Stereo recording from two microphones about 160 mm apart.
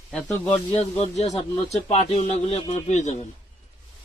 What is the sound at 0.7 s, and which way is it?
Speech, 40° left (ahead or behind).